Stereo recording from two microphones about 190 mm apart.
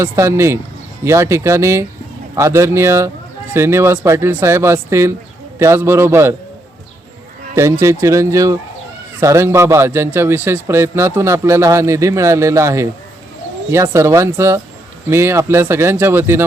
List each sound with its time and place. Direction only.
0.0 s a man's voice: 15° right (ahead or behind)
7.5 s a man's voice: 15° right (ahead or behind)